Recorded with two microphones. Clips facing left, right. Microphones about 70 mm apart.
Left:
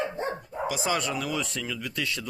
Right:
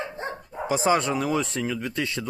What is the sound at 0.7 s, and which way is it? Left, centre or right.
Speech, right.